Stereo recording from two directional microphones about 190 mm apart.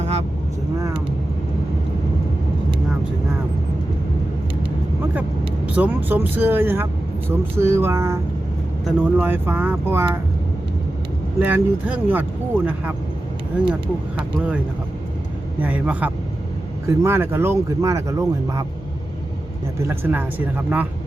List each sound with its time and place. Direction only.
0.0 s vehicle: 35° right (ahead or behind)
5.7 s speech: 10° right (ahead or behind)
11.3 s speech: 10° right (ahead or behind)
15.6 s speech: 10° right (ahead or behind)
19.8 s speech: 10° right (ahead or behind)